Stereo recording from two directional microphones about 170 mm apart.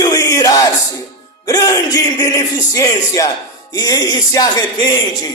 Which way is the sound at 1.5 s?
20° left (ahead or behind).